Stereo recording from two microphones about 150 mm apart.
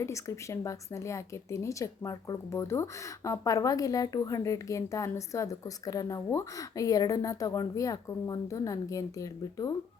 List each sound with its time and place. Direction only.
0.0 s speech: 20° left (ahead or behind)